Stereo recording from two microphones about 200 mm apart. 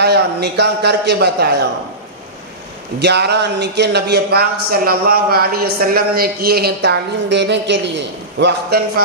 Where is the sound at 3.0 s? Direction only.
55° right (ahead or behind).